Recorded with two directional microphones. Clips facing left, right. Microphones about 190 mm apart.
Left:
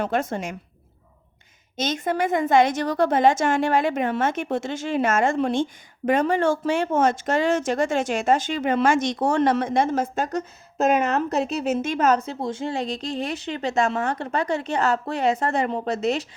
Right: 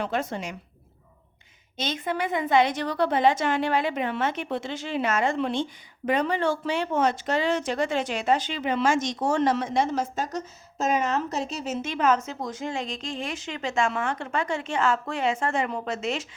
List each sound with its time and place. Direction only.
0.0 s a woman's voice: 50° left (ahead or behind)
1.7 s a woman's voice: 45° left (ahead or behind)